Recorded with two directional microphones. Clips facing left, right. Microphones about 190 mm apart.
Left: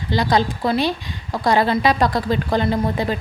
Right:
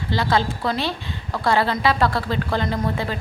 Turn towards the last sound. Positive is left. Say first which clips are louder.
# left 4 dB
turn(degrees=15)  # may be behind; listen again after turning